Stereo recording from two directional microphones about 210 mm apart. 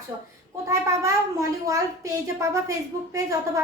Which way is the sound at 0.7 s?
15° right (ahead or behind).